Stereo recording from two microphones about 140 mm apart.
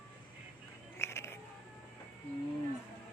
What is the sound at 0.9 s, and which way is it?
Music, 20° left (ahead or behind).